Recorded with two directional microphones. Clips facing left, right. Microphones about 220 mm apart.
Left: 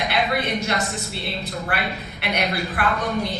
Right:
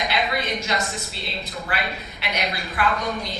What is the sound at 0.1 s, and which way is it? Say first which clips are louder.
A woman's voice: left 2 dB; 60° left (ahead or behind).